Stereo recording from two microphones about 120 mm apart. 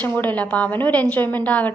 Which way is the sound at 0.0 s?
15° left (ahead or behind).